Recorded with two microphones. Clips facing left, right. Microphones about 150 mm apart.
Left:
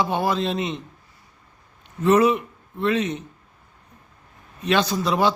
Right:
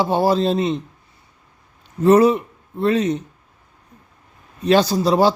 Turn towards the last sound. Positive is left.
turn(degrees=-35)  # may be behind; listen again after turning